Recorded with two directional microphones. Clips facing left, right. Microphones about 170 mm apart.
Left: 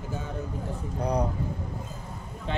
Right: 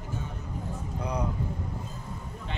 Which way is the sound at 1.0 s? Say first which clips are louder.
Left 5 dB; 35° left (ahead or behind).